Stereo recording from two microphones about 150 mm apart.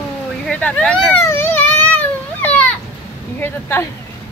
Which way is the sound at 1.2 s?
15° left (ahead or behind).